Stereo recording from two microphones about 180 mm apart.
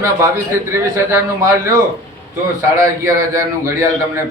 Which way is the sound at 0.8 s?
15° right (ahead or behind).